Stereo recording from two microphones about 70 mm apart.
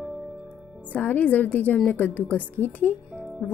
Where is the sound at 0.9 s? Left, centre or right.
Left.